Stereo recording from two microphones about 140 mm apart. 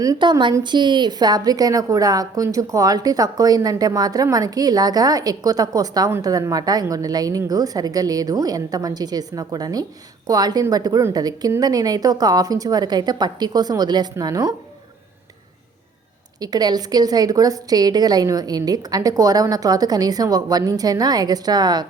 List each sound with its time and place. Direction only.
0.0 s a woman's voice: 30° right (ahead or behind)
16.4 s a woman's voice: 30° right (ahead or behind)